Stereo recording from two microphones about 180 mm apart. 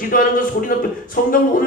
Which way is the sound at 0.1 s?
50° left (ahead or behind).